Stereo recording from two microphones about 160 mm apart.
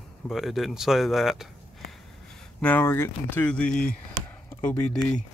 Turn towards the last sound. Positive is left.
turn(degrees=5)  # may be behind; listen again after turning